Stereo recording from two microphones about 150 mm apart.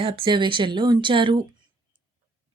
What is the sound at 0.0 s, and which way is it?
A woman's voice, 35° right (ahead or behind).